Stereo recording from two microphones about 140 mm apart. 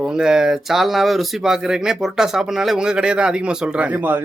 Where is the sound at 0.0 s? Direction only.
5° right (ahead or behind).